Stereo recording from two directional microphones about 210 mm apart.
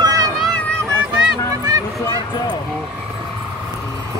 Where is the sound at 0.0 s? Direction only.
15° right (ahead or behind).